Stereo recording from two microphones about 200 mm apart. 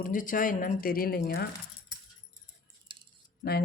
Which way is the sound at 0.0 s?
40° left (ahead or behind).